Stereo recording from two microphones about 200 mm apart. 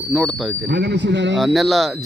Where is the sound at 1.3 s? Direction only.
Centre (ahead or behind).